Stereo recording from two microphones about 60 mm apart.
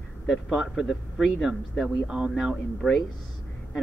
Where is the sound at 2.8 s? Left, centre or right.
Right.